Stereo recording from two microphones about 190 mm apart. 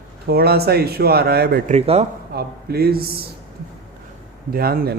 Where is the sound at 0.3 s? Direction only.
55° right (ahead or behind).